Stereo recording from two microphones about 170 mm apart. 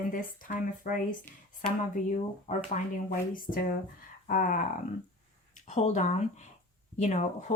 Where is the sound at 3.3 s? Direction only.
55° left (ahead or behind).